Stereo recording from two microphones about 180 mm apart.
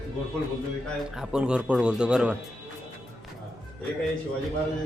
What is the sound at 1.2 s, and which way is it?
Speech, 5° right (ahead or behind).